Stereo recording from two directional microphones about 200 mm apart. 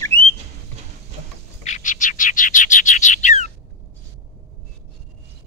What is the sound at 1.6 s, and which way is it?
Bird, 40° left (ahead or behind).